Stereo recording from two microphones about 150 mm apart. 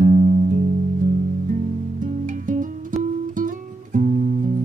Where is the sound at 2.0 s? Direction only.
60° right (ahead or behind).